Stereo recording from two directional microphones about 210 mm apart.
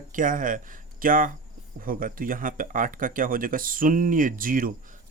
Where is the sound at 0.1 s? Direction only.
40° right (ahead or behind).